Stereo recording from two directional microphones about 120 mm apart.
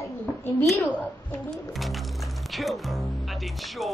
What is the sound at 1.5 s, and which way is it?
Speech, centre (ahead or behind).